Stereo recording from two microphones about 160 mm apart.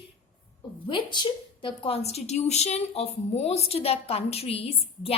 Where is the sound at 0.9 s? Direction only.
30° left (ahead or behind).